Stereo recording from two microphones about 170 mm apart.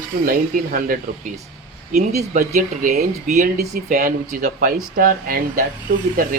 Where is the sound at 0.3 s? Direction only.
55° right (ahead or behind).